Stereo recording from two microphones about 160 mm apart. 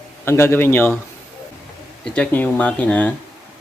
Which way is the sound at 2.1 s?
10° left (ahead or behind).